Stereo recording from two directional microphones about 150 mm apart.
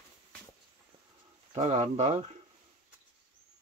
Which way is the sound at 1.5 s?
45° right (ahead or behind).